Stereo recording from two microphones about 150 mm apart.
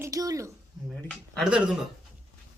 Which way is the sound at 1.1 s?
5° left (ahead or behind).